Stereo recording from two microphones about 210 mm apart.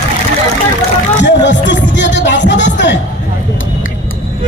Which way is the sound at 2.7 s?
55° left (ahead or behind).